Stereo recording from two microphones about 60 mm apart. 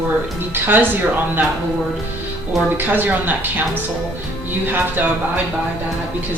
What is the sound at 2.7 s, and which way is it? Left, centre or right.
Speech, right.